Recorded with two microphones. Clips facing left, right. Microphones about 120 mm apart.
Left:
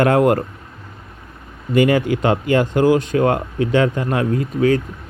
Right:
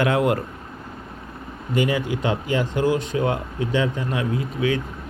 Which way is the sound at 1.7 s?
60° left (ahead or behind).